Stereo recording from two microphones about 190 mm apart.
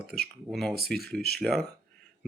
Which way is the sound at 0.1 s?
Centre (ahead or behind).